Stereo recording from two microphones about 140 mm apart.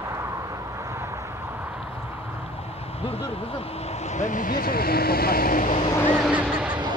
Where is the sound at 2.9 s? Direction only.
45° left (ahead or behind).